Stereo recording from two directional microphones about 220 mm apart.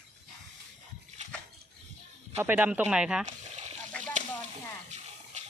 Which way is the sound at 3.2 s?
30° right (ahead or behind).